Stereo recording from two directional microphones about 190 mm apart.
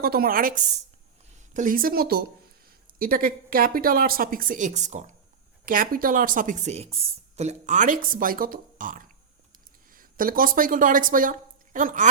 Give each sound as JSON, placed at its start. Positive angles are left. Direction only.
{"t": 0.0, "sound": "speech", "side_deg": -50}